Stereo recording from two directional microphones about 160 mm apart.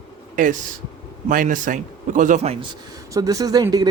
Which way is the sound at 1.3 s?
55° right (ahead or behind).